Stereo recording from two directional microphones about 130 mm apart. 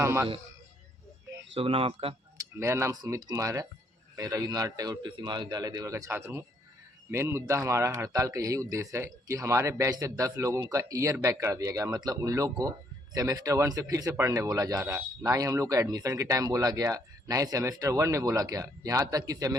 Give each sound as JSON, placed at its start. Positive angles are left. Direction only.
{"t": 0.0, "sound": "speech", "side_deg": -20}
{"t": 1.5, "sound": "speech", "side_deg": -45}
{"t": 2.6, "sound": "speech", "side_deg": -20}